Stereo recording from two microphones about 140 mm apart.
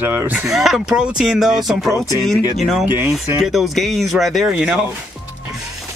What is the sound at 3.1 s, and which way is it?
Speech, centre (ahead or behind).